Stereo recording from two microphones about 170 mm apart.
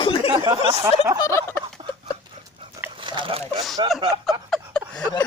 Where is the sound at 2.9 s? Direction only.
30° right (ahead or behind).